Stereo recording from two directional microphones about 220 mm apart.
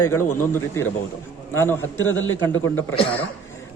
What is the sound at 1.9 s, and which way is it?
Speech, 65° left (ahead or behind).